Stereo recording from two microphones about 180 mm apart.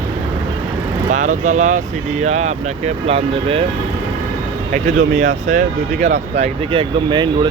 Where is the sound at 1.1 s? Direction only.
40° right (ahead or behind).